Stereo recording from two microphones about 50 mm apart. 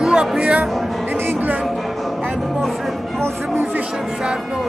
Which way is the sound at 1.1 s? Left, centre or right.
Right.